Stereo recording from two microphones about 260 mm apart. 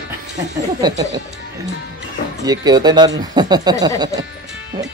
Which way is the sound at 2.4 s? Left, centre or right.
Centre.